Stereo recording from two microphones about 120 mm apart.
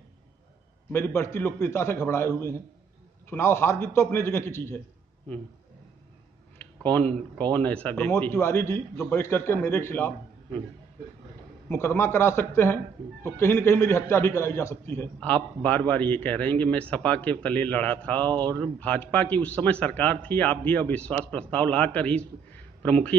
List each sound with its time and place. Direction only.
0.9 s a man's voice: 20° left (ahead or behind)
6.6 s a sound: 10° left (ahead or behind)
7.3 s a man's voice: 10° left (ahead or behind)
11.7 s a man's voice: 20° left (ahead or behind)